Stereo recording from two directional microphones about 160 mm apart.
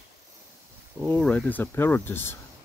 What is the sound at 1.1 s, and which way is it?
Speech, 5° left (ahead or behind).